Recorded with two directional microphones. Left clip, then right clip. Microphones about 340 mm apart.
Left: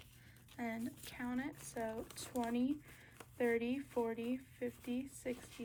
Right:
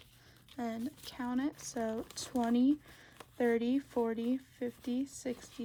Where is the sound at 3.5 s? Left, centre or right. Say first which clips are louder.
Right 6 dB; centre.